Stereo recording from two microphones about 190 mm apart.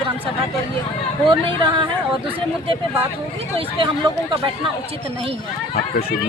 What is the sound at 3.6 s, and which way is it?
Speech, 30° right (ahead or behind).